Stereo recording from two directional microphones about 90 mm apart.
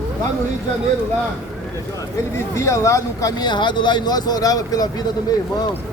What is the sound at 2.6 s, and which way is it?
Speech, 35° left (ahead or behind).